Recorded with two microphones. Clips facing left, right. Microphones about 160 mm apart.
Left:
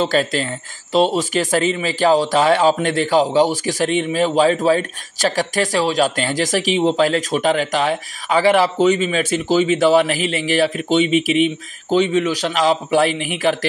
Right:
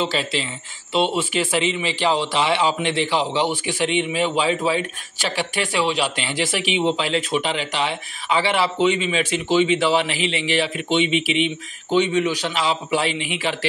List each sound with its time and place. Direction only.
0.0 s speech: 45° left (ahead or behind)